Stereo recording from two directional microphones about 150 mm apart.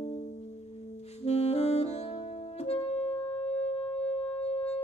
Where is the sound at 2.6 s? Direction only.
45° left (ahead or behind).